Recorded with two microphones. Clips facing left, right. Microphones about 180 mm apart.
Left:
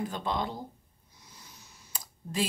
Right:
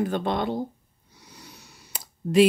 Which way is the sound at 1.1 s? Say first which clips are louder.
Right 7 dB; 70° right (ahead or behind).